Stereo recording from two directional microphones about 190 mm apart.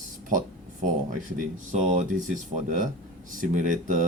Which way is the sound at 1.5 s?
40° right (ahead or behind).